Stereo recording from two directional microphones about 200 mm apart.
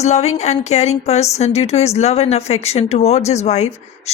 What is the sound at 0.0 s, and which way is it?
A woman's voice, 35° left (ahead or behind).